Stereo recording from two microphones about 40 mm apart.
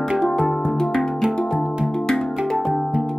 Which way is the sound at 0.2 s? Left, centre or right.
Centre.